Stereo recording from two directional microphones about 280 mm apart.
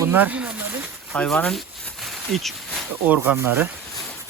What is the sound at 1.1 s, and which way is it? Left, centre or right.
Speech, centre.